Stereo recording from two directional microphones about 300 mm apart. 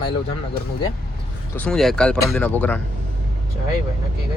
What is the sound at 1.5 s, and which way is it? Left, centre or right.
Speech, centre.